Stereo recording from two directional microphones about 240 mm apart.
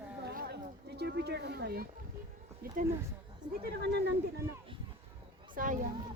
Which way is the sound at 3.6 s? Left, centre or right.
Right.